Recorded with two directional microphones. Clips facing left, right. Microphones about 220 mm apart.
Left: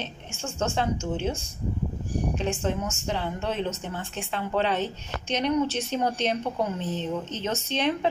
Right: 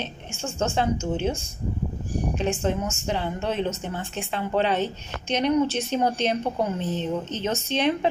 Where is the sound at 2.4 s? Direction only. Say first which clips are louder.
Right 3 dB; 15° right (ahead or behind).